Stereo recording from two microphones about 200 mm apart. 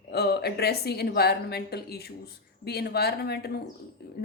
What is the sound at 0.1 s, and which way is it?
A woman's voice, 55° left (ahead or behind).